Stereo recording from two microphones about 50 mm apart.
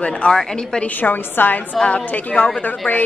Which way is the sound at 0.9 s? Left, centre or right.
Left.